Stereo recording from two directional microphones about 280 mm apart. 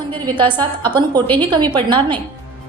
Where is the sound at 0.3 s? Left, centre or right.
Centre.